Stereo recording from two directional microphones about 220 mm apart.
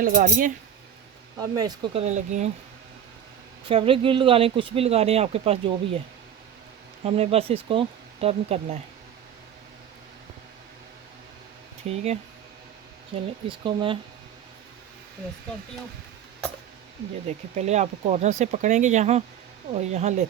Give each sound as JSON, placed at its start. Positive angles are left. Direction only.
{"t": 0.0, "sound": "speech", "side_deg": -35}
{"t": 1.4, "sound": "speech", "side_deg": -15}
{"t": 3.7, "sound": "speech", "side_deg": -25}
{"t": 7.0, "sound": "speech", "side_deg": -25}
{"t": 11.9, "sound": "speech", "side_deg": -30}
{"t": 13.5, "sound": "speech", "side_deg": -20}
{"t": 17.5, "sound": "speech", "side_deg": -30}